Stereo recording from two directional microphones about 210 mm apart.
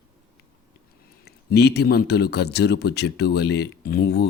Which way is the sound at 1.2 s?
50° left (ahead or behind).